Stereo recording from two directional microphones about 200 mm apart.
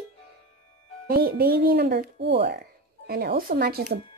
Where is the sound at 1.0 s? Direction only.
50° right (ahead or behind).